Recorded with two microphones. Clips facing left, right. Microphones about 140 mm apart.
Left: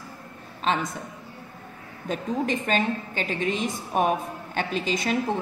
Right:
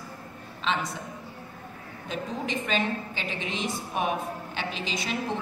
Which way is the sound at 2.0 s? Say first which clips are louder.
Left 6 dB; 45° left (ahead or behind).